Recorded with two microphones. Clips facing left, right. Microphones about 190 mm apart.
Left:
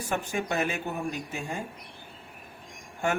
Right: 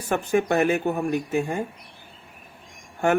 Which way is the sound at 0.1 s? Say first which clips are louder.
Right 9 dB; 55° right (ahead or behind).